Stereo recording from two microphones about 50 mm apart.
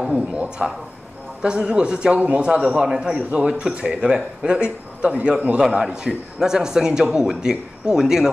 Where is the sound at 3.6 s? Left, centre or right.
Centre.